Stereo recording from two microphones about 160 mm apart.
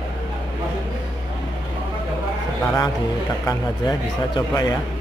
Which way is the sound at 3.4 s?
25° left (ahead or behind).